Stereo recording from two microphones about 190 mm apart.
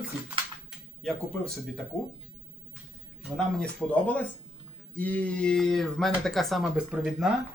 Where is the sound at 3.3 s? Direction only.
5° left (ahead or behind).